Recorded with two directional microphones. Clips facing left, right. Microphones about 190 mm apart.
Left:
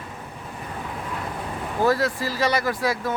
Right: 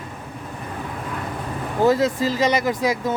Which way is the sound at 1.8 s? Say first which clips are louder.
Right 4 dB; 20° right (ahead or behind).